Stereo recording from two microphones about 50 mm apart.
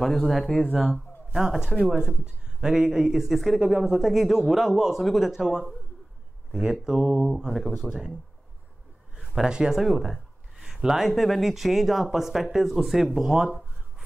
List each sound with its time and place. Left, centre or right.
0.0 s speech: centre
1.6 s speech: centre
7.9 s speech: centre
9.2 s speech: centre